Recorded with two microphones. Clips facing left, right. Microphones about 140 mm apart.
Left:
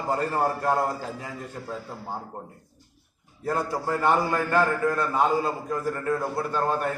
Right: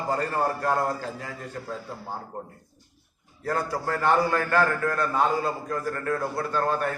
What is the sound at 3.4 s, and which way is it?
A man's voice, 20° left (ahead or behind).